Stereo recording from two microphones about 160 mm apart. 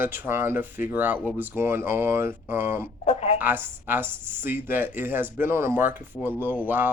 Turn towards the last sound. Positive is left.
turn(degrees=-10)  # may be behind; listen again after turning